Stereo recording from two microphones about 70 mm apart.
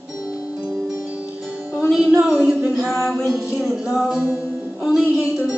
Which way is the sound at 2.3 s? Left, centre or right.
Centre.